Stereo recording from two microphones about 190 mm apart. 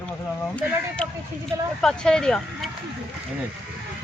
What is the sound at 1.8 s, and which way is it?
Speech, 5° left (ahead or behind).